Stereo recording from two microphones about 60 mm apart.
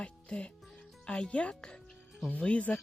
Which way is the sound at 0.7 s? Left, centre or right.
Centre.